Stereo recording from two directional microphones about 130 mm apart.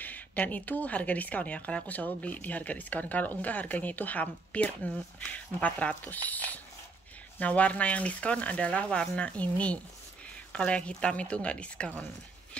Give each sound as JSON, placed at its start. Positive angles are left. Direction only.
{"t": 0.0, "sound": "speech", "side_deg": 15}